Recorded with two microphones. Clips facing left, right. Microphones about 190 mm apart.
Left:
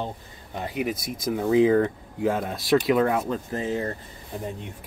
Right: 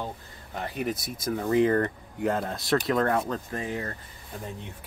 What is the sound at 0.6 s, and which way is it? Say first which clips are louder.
Speech: left 2 dB; 15° left (ahead or behind).